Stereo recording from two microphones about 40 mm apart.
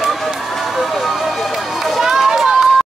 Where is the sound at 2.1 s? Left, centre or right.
Centre.